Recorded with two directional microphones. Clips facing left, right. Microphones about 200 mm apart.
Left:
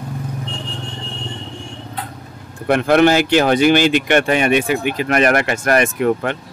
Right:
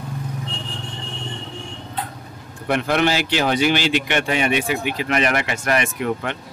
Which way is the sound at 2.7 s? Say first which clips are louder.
Left 7 dB; 50° left (ahead or behind).